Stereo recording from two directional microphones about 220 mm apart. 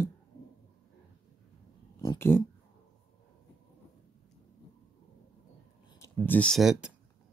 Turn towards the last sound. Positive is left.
turn(degrees=-5)  # may be behind; listen again after turning